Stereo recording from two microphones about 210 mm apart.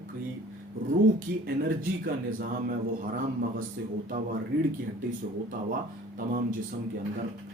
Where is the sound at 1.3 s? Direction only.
50° right (ahead or behind).